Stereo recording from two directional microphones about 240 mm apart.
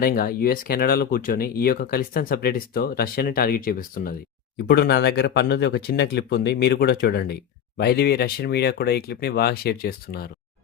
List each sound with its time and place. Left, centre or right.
0.0 s speech: left